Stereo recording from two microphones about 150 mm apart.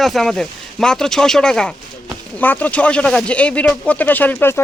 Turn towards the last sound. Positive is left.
turn(degrees=10)  # may be behind; listen again after turning